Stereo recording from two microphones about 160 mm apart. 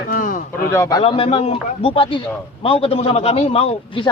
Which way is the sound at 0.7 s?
20° left (ahead or behind).